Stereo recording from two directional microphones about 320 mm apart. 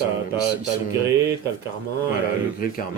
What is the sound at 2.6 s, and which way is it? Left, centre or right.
Speech, left.